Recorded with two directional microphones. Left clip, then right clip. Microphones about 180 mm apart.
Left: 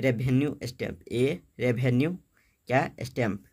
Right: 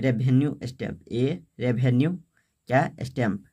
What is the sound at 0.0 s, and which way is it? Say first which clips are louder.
Speech: right 1 dB; 10° left (ahead or behind).